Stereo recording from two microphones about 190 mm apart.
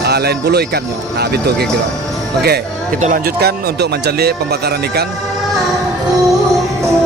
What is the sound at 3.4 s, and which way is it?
Speech, 60° right (ahead or behind).